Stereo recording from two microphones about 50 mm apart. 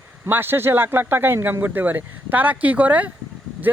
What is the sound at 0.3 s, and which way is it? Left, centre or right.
A man's voice, right.